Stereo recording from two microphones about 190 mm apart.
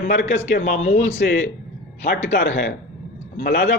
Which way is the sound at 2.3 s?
85° left.